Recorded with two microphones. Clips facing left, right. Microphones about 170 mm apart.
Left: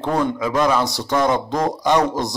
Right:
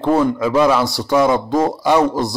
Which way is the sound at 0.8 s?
20° left (ahead or behind).